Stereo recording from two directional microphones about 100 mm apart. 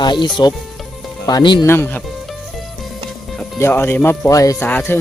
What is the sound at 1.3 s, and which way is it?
Speech, 50° left (ahead or behind).